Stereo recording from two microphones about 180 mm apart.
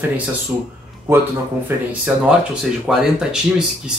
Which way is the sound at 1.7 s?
15° right (ahead or behind).